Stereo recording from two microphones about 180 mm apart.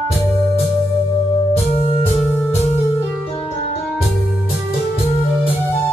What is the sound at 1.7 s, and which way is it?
Organ, 35° left (ahead or behind).